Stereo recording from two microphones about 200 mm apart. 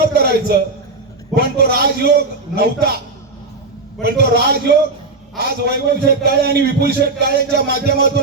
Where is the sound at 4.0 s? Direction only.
50° right (ahead or behind).